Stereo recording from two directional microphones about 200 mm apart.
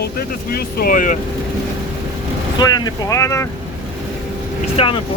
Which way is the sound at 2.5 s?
20° left (ahead or behind).